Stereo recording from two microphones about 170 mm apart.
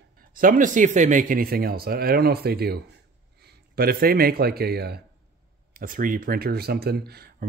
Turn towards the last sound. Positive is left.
turn(degrees=-65)  # may be behind; listen again after turning